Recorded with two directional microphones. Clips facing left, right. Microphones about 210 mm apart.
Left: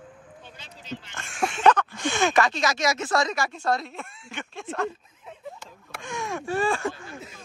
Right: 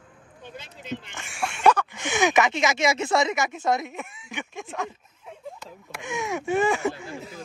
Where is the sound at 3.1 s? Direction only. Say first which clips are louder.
Right 2 dB; 20° right (ahead or behind).